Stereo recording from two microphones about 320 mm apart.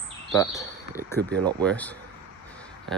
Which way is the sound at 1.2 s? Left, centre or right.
Right.